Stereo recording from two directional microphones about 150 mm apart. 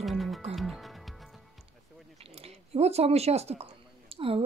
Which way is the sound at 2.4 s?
45° right (ahead or behind).